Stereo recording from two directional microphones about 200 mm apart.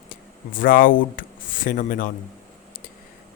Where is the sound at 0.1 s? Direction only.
45° left (ahead or behind).